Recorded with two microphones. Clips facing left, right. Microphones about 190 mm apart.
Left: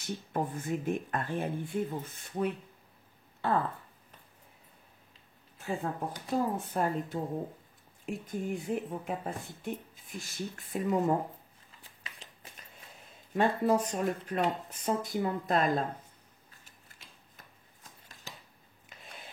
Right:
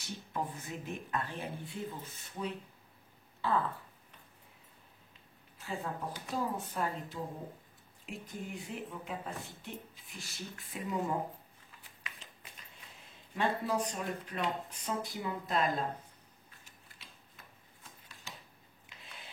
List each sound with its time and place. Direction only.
0.0 s speech: 50° left (ahead or behind)
5.6 s speech: 55° left (ahead or behind)
13.3 s speech: 45° left (ahead or behind)
18.0 s a sound: 40° left (ahead or behind)